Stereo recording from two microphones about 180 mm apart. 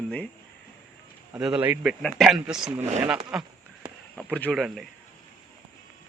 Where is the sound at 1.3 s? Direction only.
5° right (ahead or behind).